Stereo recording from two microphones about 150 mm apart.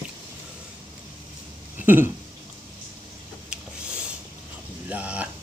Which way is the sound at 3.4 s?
5° right (ahead or behind).